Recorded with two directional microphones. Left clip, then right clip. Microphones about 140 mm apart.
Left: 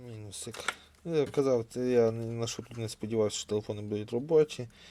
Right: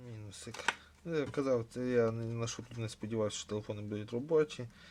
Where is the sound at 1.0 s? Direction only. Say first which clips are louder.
Left 6 dB; 20° left (ahead or behind).